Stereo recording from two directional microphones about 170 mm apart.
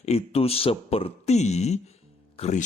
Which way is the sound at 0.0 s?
40° left (ahead or behind).